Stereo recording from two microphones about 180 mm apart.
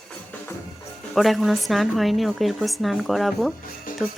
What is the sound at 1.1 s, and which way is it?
A woman's voice, centre (ahead or behind).